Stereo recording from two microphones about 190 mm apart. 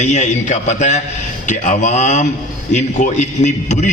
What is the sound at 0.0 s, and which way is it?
A man's voice, 40° left (ahead or behind).